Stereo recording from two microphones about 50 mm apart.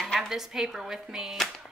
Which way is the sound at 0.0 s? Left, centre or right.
Centre.